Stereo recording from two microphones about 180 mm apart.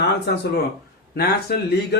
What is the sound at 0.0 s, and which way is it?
Speech, 65° left (ahead or behind).